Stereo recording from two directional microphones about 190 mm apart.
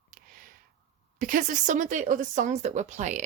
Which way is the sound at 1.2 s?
45° right (ahead or behind).